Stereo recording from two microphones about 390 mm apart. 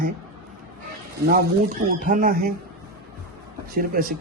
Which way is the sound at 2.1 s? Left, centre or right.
Right.